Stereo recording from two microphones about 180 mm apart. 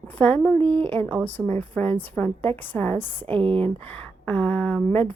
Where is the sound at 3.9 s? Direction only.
5° left (ahead or behind).